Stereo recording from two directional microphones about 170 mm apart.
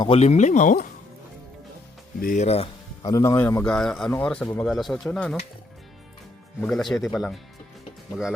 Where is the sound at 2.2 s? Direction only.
55° left (ahead or behind).